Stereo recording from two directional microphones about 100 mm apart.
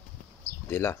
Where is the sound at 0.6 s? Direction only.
20° left (ahead or behind).